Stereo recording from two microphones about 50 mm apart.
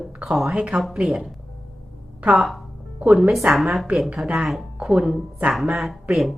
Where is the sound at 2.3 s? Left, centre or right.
Centre.